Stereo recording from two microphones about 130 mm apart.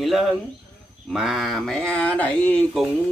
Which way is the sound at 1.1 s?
5° right (ahead or behind).